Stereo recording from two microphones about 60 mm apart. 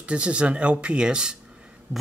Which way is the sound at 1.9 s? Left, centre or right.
Right.